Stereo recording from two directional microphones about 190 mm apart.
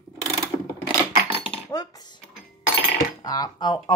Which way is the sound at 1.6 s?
20° left (ahead or behind).